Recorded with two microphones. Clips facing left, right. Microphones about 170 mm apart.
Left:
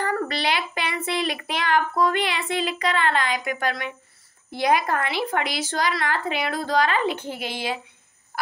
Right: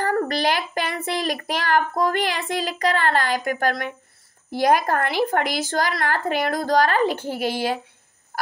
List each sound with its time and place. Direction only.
0.1 s speech: 45° right (ahead or behind)